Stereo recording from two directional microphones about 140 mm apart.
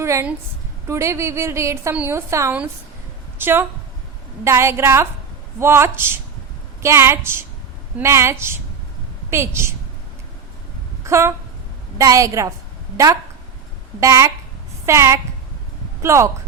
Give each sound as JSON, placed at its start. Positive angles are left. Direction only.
{"t": 0.0, "sound": "a woman's voice", "side_deg": -20}
{"t": 11.0, "sound": "a woman's voice", "side_deg": -20}
{"t": 14.0, "sound": "a woman's voice", "side_deg": -20}